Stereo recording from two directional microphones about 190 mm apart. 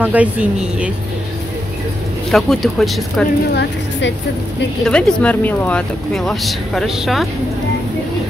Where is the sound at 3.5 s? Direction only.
70° left (ahead or behind).